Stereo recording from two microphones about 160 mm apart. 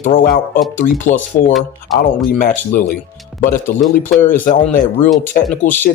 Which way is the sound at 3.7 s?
65° left (ahead or behind).